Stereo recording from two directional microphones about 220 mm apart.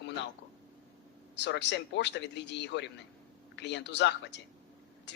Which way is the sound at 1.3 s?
50° left (ahead or behind).